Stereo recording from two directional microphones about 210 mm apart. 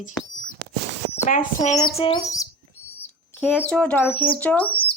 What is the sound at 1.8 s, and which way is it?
Bird, 25° left (ahead or behind).